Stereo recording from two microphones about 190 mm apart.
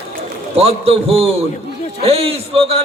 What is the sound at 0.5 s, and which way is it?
A man's voice, 30° right (ahead or behind).